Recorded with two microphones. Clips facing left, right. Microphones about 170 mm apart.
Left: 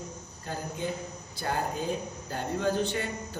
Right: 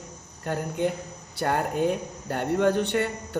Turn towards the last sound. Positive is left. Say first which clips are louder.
# right 7 dB
turn(degrees=-65)  # may be behind; listen again after turning